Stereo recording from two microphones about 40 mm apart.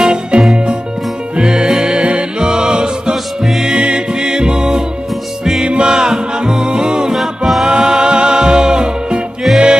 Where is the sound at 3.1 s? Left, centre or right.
Centre.